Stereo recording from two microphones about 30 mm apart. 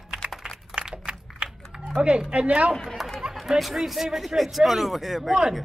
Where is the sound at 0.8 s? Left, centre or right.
Right.